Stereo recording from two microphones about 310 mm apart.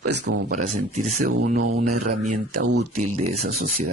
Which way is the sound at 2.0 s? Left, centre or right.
Right.